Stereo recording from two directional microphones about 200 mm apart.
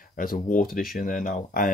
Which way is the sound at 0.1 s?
45° left (ahead or behind).